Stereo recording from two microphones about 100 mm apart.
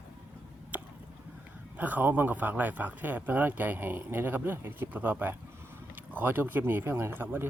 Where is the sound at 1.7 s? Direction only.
15° right (ahead or behind).